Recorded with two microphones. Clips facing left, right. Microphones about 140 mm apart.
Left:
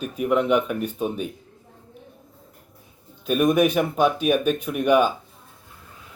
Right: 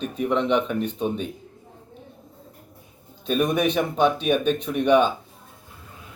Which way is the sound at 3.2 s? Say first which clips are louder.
Left 3 dB; 10° left (ahead or behind).